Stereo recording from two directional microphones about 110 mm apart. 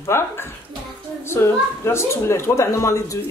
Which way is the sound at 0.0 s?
20° left (ahead or behind).